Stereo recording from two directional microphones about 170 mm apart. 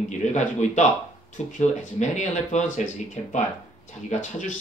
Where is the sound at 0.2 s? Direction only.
45° left (ahead or behind).